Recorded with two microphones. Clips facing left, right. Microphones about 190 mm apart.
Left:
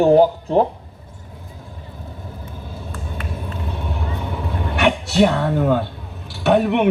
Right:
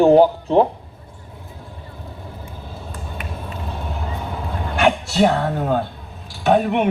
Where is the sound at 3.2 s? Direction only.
15° right (ahead or behind).